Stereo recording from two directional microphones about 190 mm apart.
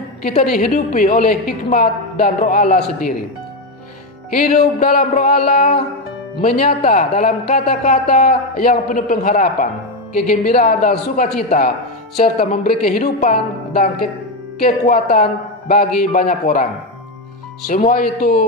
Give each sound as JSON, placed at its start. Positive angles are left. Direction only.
{"t": 0.3, "sound": "a man's voice", "side_deg": 45}
{"t": 4.4, "sound": "a man's voice", "side_deg": 45}
{"t": 17.6, "sound": "a man's voice", "side_deg": 45}